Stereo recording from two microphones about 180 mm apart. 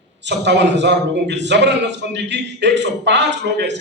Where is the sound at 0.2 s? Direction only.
75° right (ahead or behind).